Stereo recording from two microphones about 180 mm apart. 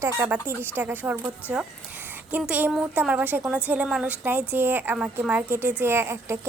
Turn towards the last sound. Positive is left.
turn(degrees=-15)  # may be behind; listen again after turning